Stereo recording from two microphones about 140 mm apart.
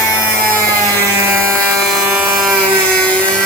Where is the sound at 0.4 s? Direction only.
10° left (ahead or behind).